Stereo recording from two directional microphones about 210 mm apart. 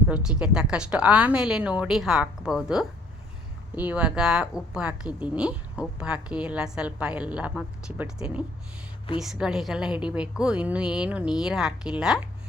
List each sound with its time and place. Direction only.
0.1 s a woman's voice: 5° right (ahead or behind)